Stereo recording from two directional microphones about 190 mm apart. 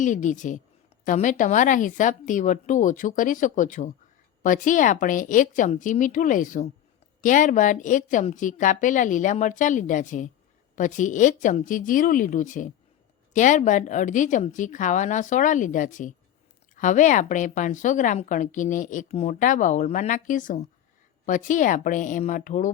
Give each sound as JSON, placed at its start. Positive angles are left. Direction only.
{"t": 0.0, "sound": "a woman's voice", "side_deg": 40}